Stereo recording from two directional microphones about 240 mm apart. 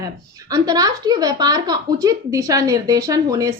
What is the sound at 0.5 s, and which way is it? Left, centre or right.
A woman's voice, centre.